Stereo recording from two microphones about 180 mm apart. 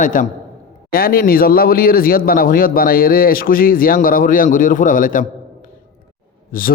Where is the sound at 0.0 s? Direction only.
45° left (ahead or behind).